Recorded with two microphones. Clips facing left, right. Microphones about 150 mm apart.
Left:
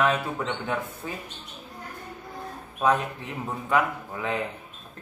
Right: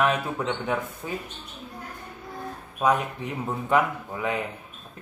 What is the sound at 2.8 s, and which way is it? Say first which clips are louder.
Speech: even; 15° right (ahead or behind).